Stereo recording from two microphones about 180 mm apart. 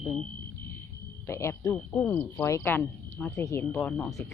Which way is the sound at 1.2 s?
15° left (ahead or behind).